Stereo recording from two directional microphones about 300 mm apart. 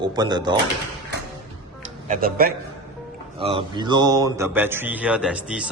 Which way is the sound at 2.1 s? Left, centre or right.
Right.